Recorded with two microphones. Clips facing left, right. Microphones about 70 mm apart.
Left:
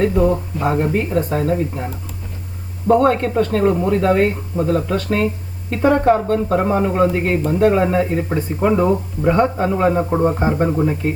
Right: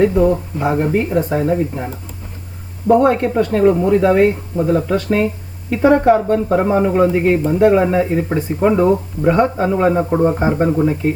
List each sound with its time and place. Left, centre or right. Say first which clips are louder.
0.6 s speech: right 2 dB; centre
2.9 s speech: right 2 dB; centre